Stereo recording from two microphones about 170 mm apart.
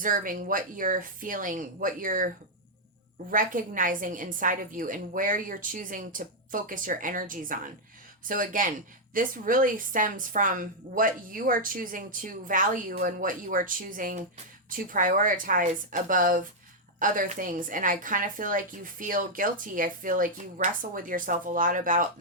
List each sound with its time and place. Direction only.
0.0 s a woman's voice: 55° right (ahead or behind)